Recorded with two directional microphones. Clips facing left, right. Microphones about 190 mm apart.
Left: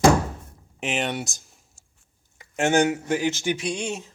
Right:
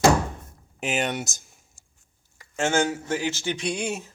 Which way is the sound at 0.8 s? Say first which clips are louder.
Even; centre (ahead or behind).